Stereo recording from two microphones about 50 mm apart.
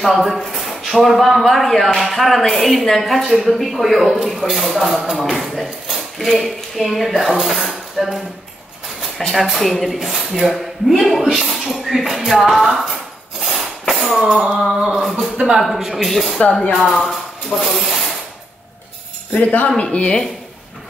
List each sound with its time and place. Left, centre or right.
0.0 s a woman's voice: centre
9.3 s a woman's voice: centre
13.4 s a sound: centre
15.0 s speech: centre
15.3 s a sound: centre
15.6 s a woman's voice: centre
16.3 s speech: centre
16.7 s speech: centre
19.3 s speech: left